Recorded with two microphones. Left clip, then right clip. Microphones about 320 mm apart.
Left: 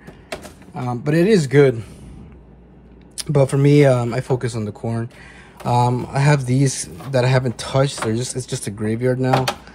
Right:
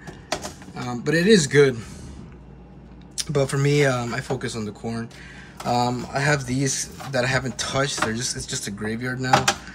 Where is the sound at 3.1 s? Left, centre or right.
Centre.